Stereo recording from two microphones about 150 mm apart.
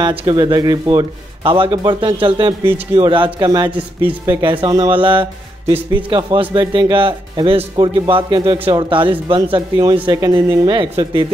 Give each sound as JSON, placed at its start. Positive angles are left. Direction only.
{"t": 0.2, "sound": "a man's voice", "side_deg": -30}
{"t": 5.7, "sound": "speech", "side_deg": -10}
{"t": 6.0, "sound": "a man's voice", "side_deg": -35}